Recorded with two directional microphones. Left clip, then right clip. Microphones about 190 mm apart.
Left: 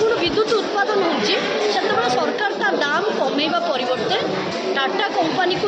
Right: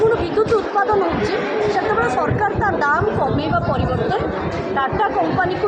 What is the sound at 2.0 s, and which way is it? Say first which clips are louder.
Speech: right 1 dB; 10° right (ahead or behind).